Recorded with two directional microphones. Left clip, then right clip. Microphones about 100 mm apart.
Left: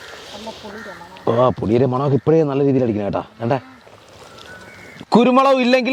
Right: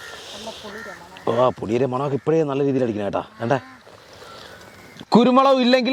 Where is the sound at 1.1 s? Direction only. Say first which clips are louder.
Left 3 dB; 35° right (ahead or behind).